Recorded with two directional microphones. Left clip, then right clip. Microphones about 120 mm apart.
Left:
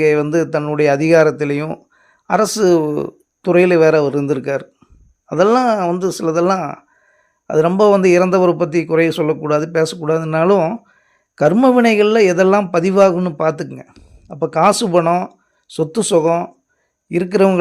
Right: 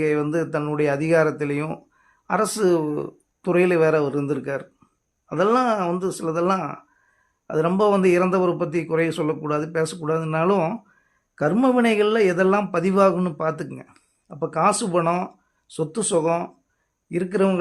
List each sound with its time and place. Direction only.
0.0 s speech: 50° left (ahead or behind)
13.3 s a man's voice: 55° left (ahead or behind)
13.7 s speech: 30° left (ahead or behind)
14.3 s speech: 45° left (ahead or behind)
15.0 s speech: 45° left (ahead or behind)
17.1 s a man's voice: 60° left (ahead or behind)